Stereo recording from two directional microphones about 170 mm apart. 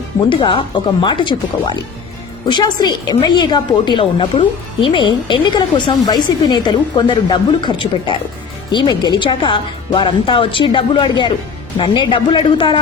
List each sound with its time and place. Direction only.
0.3 s a woman's voice: 30° left (ahead or behind)